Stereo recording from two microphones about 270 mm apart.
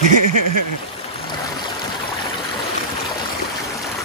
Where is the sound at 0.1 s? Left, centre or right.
Right.